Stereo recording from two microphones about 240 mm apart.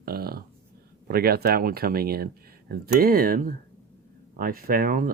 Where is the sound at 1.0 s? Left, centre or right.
Right.